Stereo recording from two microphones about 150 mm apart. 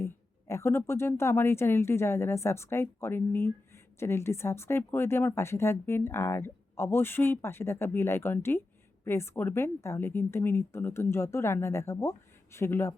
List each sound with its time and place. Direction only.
0.0 s speech: 15° left (ahead or behind)